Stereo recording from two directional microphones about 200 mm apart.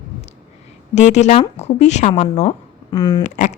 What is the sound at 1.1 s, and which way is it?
Speech, 35° left (ahead or behind).